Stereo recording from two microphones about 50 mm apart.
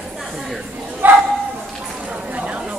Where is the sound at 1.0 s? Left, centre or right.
Right.